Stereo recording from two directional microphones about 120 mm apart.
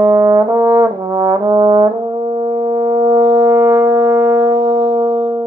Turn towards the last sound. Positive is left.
turn(degrees=-35)  # may be behind; listen again after turning